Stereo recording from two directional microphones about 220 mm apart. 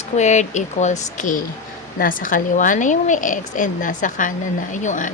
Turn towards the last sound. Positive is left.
turn(degrees=35)  # may be behind; listen again after turning